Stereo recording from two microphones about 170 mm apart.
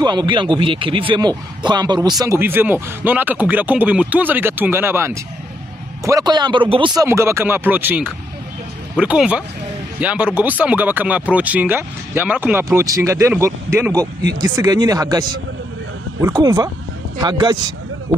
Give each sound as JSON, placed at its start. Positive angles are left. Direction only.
{"t": 0.0, "sound": "speech", "side_deg": -25}
{"t": 7.0, "sound": "speech", "side_deg": -15}